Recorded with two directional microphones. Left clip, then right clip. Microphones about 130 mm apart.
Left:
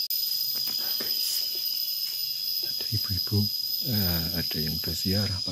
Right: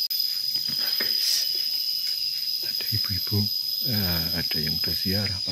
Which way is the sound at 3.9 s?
15° left (ahead or behind).